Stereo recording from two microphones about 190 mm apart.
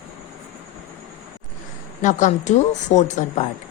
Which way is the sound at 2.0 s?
40° left (ahead or behind).